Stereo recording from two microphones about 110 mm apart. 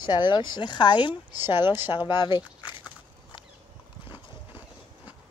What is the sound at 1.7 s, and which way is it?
Speech, 20° right (ahead or behind).